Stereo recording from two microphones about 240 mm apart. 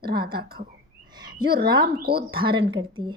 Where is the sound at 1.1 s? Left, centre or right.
Centre.